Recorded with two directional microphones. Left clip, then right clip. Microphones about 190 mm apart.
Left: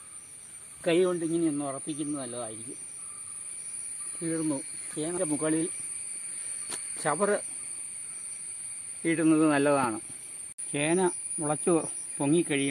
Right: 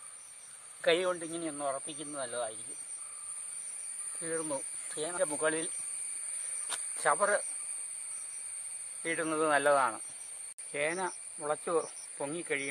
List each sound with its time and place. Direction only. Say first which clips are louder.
0.8 s speech: left 4 dB; 5° right (ahead or behind)
4.2 s speech: left 5 dB; centre (ahead or behind)
7.0 s speech: left 1 dB; 10° left (ahead or behind)
9.0 s speech: left 7 dB; 20° left (ahead or behind)
10.7 s speech: left 6 dB; 60° left (ahead or behind)